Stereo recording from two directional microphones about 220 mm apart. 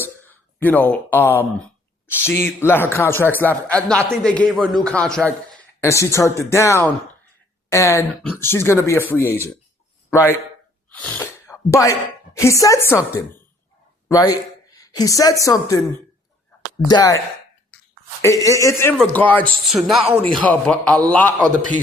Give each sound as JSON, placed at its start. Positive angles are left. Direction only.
{"t": 0.0, "sound": "speech", "side_deg": 10}